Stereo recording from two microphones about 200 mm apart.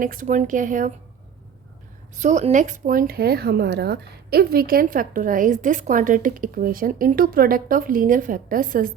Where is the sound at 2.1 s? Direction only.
35° right (ahead or behind).